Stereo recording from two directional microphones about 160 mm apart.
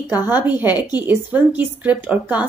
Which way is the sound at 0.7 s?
25° left (ahead or behind).